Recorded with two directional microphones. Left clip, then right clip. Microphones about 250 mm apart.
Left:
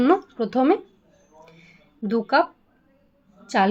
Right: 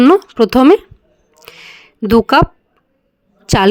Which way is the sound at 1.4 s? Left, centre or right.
Right.